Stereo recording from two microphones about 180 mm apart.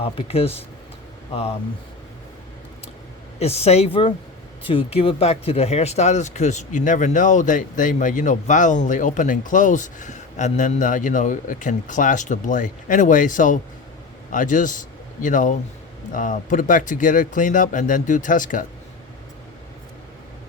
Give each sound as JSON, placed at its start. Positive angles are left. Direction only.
{"t": 0.0, "sound": "speech", "side_deg": 35}
{"t": 3.3, "sound": "speech", "side_deg": 35}